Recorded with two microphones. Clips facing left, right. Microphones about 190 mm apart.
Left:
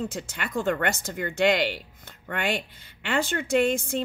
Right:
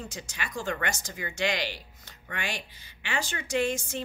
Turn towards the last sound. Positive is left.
turn(degrees=55)  # may be behind; listen again after turning